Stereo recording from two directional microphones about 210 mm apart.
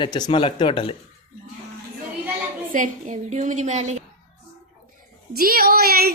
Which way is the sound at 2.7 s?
35° right (ahead or behind).